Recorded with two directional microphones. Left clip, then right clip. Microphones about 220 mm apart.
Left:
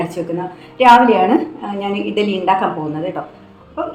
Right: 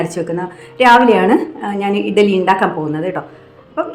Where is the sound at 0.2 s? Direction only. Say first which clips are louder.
Right 2 dB; 20° right (ahead or behind).